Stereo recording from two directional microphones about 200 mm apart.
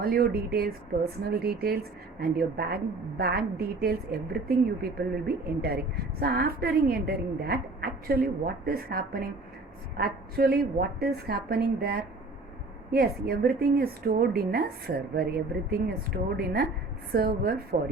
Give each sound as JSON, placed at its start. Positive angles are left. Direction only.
{"t": 0.0, "sound": "a woman's voice", "side_deg": -50}